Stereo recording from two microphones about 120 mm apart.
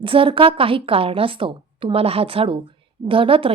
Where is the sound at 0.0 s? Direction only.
45° right (ahead or behind).